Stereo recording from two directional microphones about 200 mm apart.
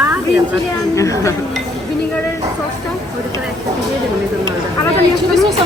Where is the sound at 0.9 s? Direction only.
15° left (ahead or behind).